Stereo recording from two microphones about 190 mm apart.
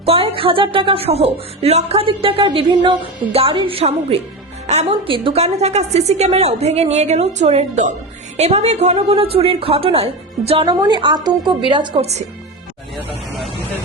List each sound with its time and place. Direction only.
0.0 s a woman's voice: 30° right (ahead or behind)